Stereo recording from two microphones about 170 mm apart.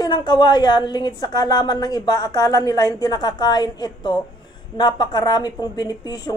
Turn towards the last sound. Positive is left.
turn(degrees=25)  # may be behind; listen again after turning